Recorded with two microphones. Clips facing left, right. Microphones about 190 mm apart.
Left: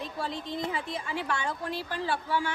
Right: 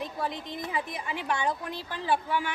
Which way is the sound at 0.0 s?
20° right (ahead or behind).